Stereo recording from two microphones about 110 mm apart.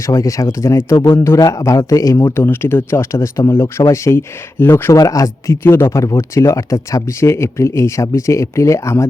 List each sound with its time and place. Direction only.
0.0 s speech: 30° left (ahead or behind)